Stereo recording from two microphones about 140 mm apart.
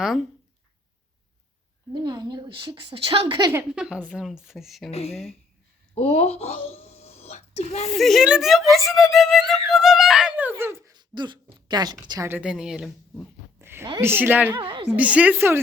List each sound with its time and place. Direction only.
0.0 s speech: centre (ahead or behind)
1.9 s a woman's voice: 30° right (ahead or behind)
3.7 s speech: 5° right (ahead or behind)
4.9 s speech: 45° left (ahead or behind)
5.9 s a sound: 45° left (ahead or behind)
7.9 s speech: centre (ahead or behind); by 10.9 s 20° right (ahead or behind)
10.9 s speech: 35° right (ahead or behind)
12.3 s speech: 5° right (ahead or behind)
13.6 s a sound: 15° right (ahead or behind)
14.0 s a woman's voice: 15° right (ahead or behind)
14.6 s a woman's voice: 40° right (ahead or behind)
14.9 s a woman's voice: 10° right (ahead or behind)